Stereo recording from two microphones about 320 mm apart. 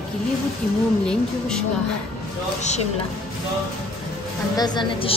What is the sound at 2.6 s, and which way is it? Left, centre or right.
Speech, left.